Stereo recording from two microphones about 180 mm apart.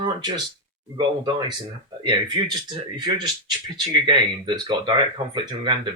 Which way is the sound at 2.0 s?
25° right (ahead or behind).